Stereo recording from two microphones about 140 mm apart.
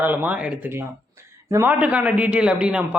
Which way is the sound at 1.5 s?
20° right (ahead or behind).